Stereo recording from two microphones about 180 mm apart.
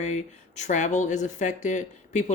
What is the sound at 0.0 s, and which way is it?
Speech, 40° left (ahead or behind).